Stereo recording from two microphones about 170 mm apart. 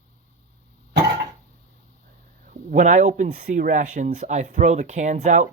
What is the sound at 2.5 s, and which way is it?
Speech, 45° right (ahead or behind).